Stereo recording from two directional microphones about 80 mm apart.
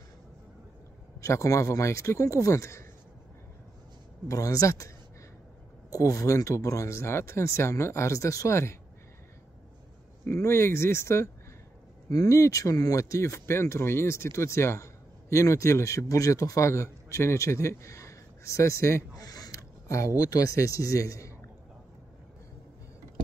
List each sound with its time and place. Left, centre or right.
1.2 s speech: left
4.3 s speech: left
10.3 s speech: left
19.2 s a sound: left
19.9 s speech: left